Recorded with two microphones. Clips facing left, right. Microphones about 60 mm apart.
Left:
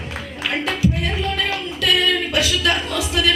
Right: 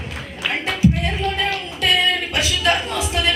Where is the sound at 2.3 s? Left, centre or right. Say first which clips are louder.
Even; right.